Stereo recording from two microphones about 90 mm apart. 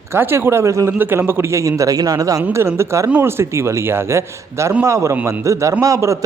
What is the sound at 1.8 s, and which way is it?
Speech, 40° right (ahead or behind).